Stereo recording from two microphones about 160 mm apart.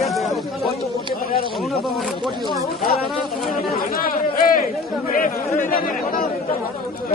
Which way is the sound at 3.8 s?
65° left (ahead or behind).